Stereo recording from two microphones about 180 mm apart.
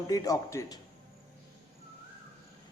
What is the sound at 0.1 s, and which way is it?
Speech, 20° left (ahead or behind).